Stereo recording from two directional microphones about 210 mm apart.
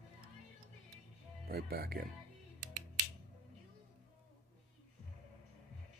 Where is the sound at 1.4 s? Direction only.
45° right (ahead or behind).